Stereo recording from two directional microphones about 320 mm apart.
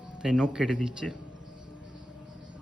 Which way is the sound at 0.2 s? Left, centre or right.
Centre.